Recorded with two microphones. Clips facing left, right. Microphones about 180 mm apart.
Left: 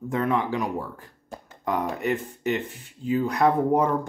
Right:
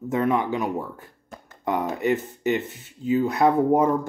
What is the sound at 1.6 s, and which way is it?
Speech, 25° right (ahead or behind).